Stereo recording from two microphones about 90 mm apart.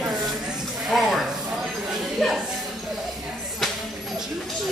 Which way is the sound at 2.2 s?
Centre (ahead or behind).